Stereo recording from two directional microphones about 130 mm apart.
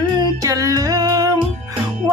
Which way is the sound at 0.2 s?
30° right (ahead or behind).